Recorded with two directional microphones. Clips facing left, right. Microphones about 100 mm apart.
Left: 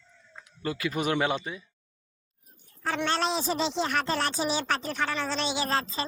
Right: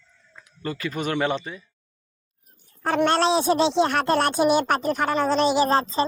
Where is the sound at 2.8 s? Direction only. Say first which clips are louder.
Right 8 dB; 55° right (ahead or behind).